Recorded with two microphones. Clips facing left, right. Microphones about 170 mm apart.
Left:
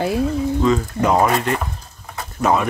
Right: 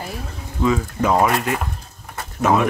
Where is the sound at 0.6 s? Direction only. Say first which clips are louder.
Right 2 dB; 5° right (ahead or behind).